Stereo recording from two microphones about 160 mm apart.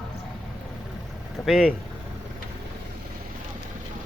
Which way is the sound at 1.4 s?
Centre (ahead or behind).